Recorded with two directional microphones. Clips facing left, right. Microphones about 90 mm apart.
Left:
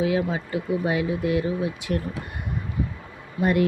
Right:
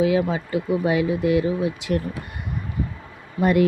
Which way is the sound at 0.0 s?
90° right.